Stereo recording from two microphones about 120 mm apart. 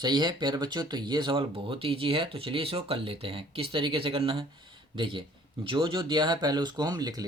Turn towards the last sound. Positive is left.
turn(degrees=-30)  # may be behind; listen again after turning